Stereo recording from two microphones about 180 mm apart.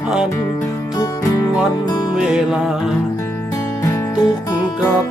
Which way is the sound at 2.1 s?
5° right (ahead or behind).